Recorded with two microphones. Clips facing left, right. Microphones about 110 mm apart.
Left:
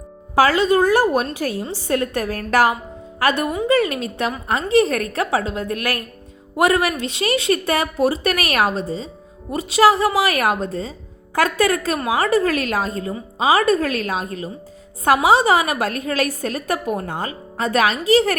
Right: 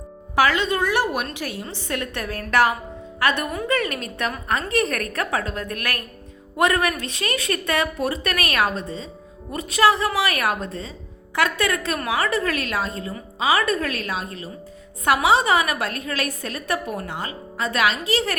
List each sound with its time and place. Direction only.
0.3 s a woman's voice: 35° left (ahead or behind)
11.9 s a woman's voice: 25° left (ahead or behind)
12.2 s speech: 35° left (ahead or behind)